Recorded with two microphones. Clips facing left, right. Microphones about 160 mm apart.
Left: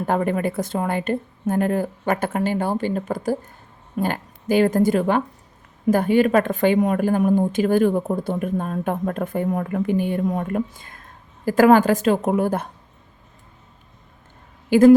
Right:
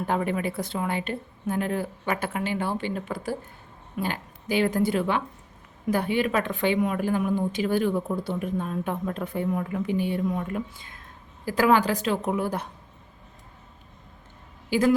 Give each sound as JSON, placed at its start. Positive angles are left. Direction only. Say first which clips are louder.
{"t": 0.0, "sound": "a woman's voice", "louder": "left 5 dB", "side_deg": 45}
{"t": 14.7, "sound": "speech", "louder": "left 10 dB", "side_deg": 50}